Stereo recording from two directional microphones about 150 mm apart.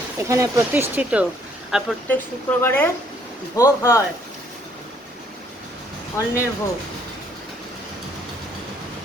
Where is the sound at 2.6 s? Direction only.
15° left (ahead or behind).